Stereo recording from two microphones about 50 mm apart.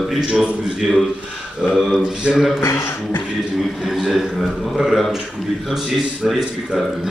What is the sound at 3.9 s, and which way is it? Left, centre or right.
A man's voice, centre.